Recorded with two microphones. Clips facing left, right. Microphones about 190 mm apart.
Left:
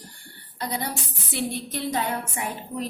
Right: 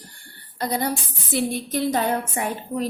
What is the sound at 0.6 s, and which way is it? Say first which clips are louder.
Speech: right 5 dB; 40° right (ahead or behind).